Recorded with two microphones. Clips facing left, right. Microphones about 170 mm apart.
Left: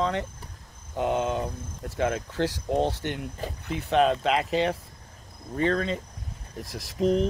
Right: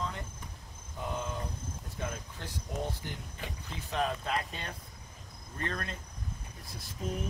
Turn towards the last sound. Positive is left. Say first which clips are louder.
# left 14 dB
turn(degrees=75)  # may be behind; listen again after turning